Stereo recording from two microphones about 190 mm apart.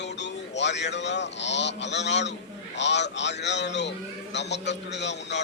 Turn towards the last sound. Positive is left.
turn(degrees=65)  # may be behind; listen again after turning